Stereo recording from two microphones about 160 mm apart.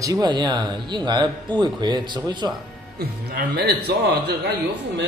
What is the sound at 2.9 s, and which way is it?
A man's voice, 90° right.